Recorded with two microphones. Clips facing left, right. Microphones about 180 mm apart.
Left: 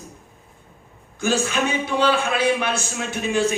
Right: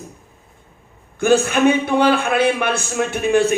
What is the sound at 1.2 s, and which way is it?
Speech, 55° right (ahead or behind).